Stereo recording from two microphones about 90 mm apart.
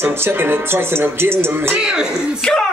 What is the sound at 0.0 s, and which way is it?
Speech, 25° right (ahead or behind).